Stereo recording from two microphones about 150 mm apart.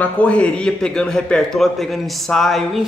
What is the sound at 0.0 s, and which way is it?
Speech, 10° left (ahead or behind).